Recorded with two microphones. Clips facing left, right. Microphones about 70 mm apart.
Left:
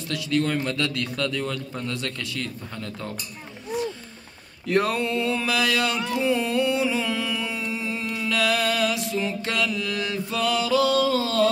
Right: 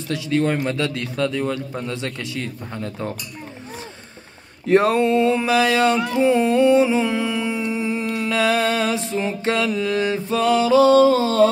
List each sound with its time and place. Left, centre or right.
0.1 s mantra: right
4.6 s mantra: right